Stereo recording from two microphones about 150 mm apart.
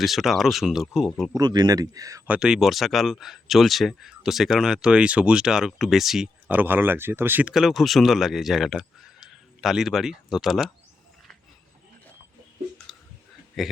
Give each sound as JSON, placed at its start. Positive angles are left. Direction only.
{"t": 0.0, "sound": "speech", "side_deg": 0}
{"t": 1.3, "sound": "speech", "side_deg": -30}
{"t": 2.2, "sound": "speech", "side_deg": -5}
{"t": 13.6, "sound": "speech", "side_deg": 0}